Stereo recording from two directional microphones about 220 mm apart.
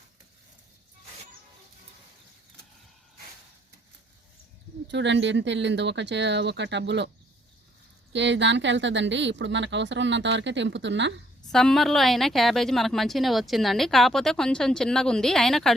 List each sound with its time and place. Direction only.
4.9 s speech: 55° right (ahead or behind)
8.1 s speech: 55° right (ahead or behind)
11.5 s a woman's voice: centre (ahead or behind)